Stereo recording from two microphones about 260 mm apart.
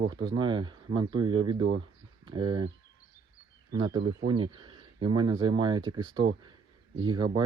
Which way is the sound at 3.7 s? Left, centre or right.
Centre.